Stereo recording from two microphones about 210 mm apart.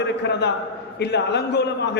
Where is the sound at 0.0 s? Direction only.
55° left (ahead or behind).